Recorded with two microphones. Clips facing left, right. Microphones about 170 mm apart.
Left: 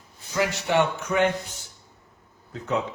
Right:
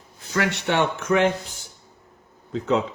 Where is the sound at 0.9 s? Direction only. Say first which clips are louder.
Right 3 dB; 90° right.